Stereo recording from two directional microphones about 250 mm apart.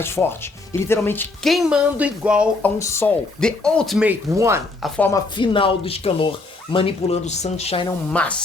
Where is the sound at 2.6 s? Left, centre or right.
Centre.